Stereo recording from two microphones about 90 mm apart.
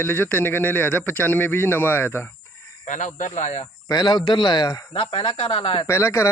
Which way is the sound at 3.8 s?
50° left (ahead or behind).